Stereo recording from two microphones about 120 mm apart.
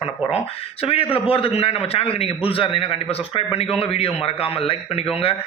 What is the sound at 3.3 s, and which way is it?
A man's voice, 55° left (ahead or behind).